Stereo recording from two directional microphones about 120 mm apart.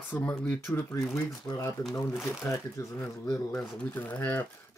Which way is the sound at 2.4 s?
20° left (ahead or behind).